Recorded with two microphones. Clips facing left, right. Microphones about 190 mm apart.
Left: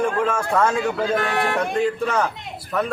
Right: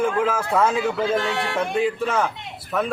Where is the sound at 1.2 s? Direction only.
55° left (ahead or behind).